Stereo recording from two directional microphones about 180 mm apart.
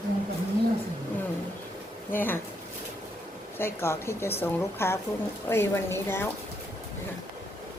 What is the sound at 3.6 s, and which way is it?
A woman's voice, 15° left (ahead or behind).